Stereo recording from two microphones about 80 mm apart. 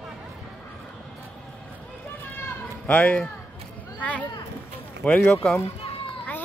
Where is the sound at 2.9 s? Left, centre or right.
Centre.